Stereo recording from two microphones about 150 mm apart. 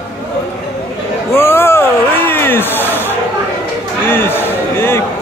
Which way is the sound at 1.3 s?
15° left (ahead or behind).